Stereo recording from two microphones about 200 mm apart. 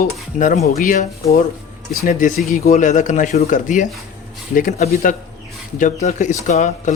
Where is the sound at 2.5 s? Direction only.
40° left (ahead or behind).